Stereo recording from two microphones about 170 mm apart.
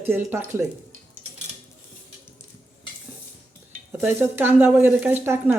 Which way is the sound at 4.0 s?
10° right (ahead or behind).